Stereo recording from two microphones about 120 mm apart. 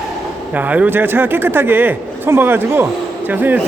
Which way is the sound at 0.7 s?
15° right (ahead or behind).